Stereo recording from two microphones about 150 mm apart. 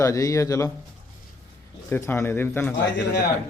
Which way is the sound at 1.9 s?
15° left (ahead or behind).